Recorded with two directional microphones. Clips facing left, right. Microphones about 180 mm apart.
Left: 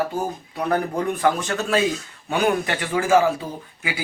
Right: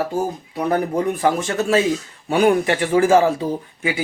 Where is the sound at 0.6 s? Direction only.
25° right (ahead or behind).